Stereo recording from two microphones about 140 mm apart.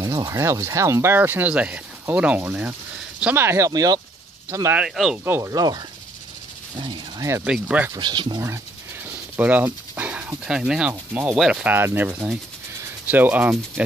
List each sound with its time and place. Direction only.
0.0 s speech: 25° right (ahead or behind)
4.8 s speech: centre (ahead or behind)
5.2 s speech: 15° right (ahead or behind)
5.5 s speech: 30° right (ahead or behind)
7.2 s speech: 20° right (ahead or behind)
7.4 s speech: 10° right (ahead or behind)
7.9 s speech: 35° right (ahead or behind)
9.4 s speech: 10° right (ahead or behind)